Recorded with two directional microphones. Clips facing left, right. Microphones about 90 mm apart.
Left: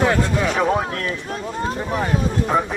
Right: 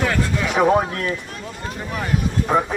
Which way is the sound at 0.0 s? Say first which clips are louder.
Left 3 dB; 25° left (ahead or behind).